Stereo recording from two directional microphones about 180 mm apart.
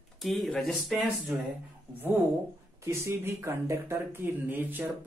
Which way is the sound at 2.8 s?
15° right (ahead or behind).